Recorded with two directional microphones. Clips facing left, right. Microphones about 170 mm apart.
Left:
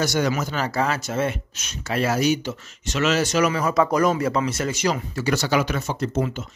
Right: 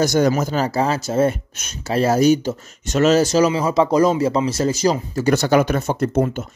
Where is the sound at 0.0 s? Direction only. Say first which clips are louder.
Right 6 dB; 45° right (ahead or behind).